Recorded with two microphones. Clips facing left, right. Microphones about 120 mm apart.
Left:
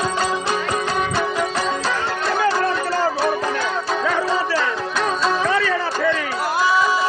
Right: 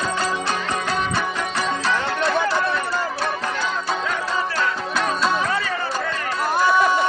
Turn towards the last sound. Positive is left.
turn(degrees=0)  # may be behind; listen again after turning